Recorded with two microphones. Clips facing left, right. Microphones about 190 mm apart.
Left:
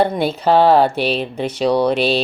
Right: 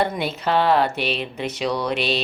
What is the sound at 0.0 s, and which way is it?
Speech, 30° left (ahead or behind).